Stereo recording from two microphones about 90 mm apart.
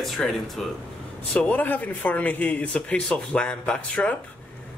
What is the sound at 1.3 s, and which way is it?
Speech, 15° left (ahead or behind).